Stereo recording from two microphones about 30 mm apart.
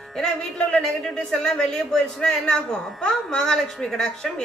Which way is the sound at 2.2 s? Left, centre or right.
Left.